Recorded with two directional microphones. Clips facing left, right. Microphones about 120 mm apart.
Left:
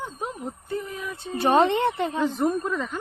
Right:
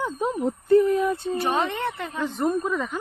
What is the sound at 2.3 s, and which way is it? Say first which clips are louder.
Speech: even; centre (ahead or behind).